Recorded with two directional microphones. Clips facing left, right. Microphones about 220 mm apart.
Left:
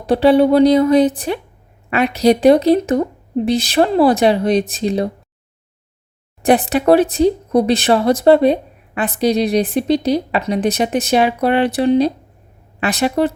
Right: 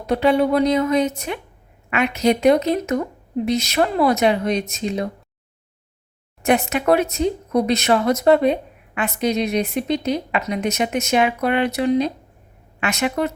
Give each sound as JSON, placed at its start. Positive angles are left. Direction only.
{"t": 0.0, "sound": "a woman's voice", "side_deg": 30}
{"t": 6.4, "sound": "a woman's voice", "side_deg": 35}